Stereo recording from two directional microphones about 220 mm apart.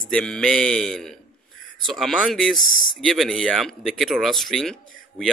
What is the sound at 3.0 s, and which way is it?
Speech, centre (ahead or behind).